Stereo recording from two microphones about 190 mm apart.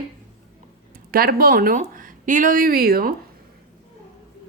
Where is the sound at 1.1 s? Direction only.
50° right (ahead or behind).